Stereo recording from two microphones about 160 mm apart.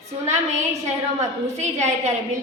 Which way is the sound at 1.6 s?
45° right (ahead or behind).